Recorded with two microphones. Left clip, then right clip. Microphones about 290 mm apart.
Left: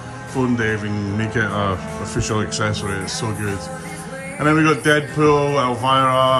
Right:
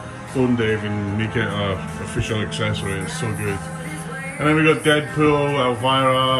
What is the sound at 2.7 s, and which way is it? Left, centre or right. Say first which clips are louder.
Speech: left 1 dB; left.